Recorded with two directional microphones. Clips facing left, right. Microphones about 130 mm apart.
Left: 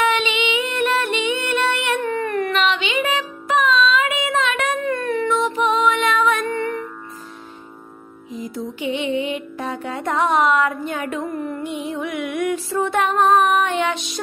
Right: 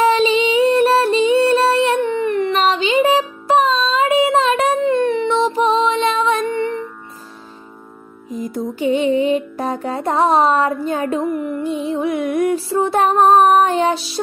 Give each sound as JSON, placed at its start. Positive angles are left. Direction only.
{"t": 0.0, "sound": "music", "side_deg": -35}
{"t": 2.5, "sound": "music", "side_deg": -35}
{"t": 8.3, "sound": "music", "side_deg": -45}
{"t": 11.2, "sound": "music", "side_deg": 25}
{"t": 11.6, "sound": "music", "side_deg": -35}